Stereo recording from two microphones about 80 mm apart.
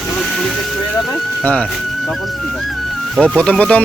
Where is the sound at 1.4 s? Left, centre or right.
Centre.